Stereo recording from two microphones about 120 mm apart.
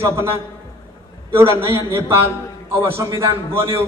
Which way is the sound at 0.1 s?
20° right (ahead or behind).